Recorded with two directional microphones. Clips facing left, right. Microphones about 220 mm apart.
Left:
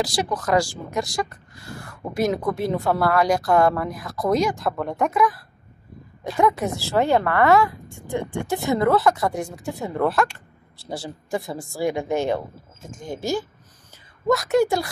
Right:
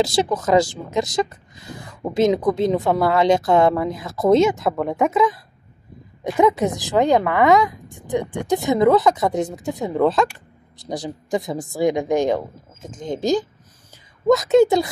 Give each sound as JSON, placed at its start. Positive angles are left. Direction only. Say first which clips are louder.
{"t": 0.0, "sound": "speech", "louder": "right 5 dB", "side_deg": -25}
{"t": 4.6, "sound": "a woman's voice", "louder": "right 4 dB", "side_deg": -5}
{"t": 5.1, "sound": "speech", "louder": "right 3 dB", "side_deg": -20}